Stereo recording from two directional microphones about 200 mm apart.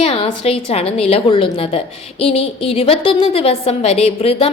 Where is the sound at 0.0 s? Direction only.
30° left (ahead or behind).